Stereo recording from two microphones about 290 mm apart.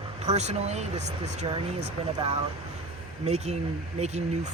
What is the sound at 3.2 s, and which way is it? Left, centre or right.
Speech, right.